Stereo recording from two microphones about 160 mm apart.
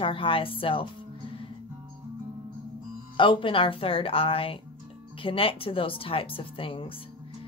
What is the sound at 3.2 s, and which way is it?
Speech, 30° left (ahead or behind).